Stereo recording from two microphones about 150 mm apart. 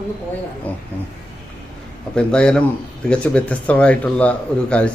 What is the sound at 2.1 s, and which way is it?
A man's voice, 5° left (ahead or behind).